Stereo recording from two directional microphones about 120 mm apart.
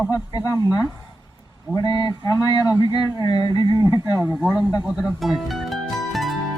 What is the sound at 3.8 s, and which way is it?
Speech, 30° right (ahead or behind).